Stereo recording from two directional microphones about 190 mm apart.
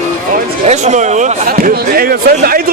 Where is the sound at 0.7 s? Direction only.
35° right (ahead or behind).